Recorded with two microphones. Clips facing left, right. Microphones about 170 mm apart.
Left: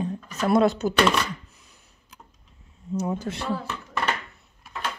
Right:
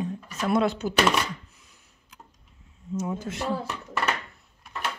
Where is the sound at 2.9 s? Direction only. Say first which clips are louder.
Left 3 dB; 35° left (ahead or behind).